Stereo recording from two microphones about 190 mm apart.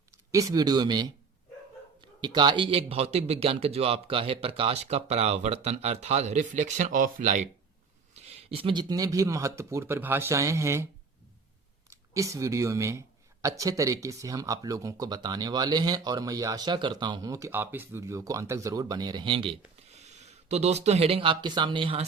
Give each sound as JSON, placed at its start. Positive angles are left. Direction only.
{"t": 0.1, "sound": "speech", "side_deg": -15}
{"t": 11.9, "sound": "speech", "side_deg": -15}